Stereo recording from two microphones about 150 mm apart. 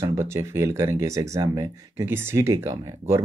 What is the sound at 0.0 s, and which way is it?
Speech, 15° right (ahead or behind).